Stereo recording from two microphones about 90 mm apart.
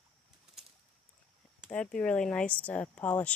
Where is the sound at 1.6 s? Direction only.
15° left (ahead or behind).